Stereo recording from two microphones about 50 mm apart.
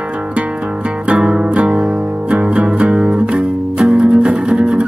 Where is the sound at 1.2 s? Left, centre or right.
Right.